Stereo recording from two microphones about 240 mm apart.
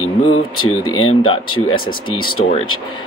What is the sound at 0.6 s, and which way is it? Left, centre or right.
Speech, left.